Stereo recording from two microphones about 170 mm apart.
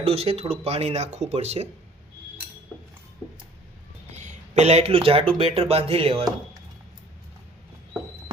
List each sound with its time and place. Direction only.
0.0 s speech: 35° right (ahead or behind)
4.2 s speech: 40° right (ahead or behind)